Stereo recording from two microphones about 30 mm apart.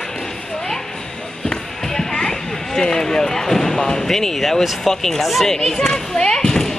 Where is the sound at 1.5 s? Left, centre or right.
Left.